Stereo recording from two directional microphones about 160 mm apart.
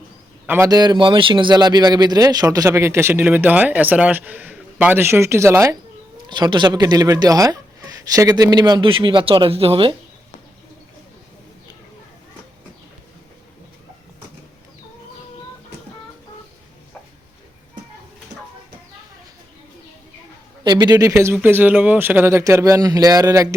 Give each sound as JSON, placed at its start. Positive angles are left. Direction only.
{"t": 0.4, "sound": "a man's voice", "side_deg": -10}
{"t": 0.7, "sound": "speech", "side_deg": -25}
{"t": 6.2, "sound": "speech", "side_deg": -30}
{"t": 20.7, "sound": "speech", "side_deg": -25}